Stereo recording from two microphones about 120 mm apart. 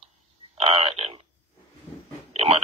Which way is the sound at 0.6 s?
55° right (ahead or behind).